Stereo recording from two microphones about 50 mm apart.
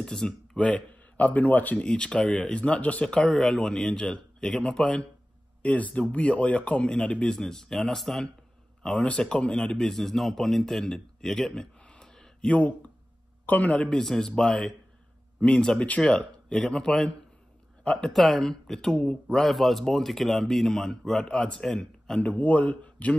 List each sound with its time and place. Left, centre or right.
0.0 s a man's voice: centre
0.6 s a man's voice: left
1.8 s speech: centre
3.1 s speech: centre
7.2 s speech: centre
9.0 s speech: left
11.8 s a sound: centre
12.4 s speech: left
13.8 s speech: centre
18.1 s speech: centre
19.3 s speech: centre
22.2 s speech: left